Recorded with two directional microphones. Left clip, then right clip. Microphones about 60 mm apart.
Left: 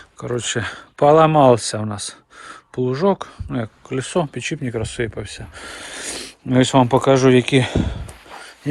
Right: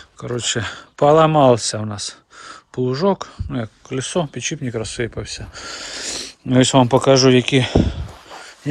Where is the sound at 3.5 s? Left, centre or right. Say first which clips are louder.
Left 1 dB; right.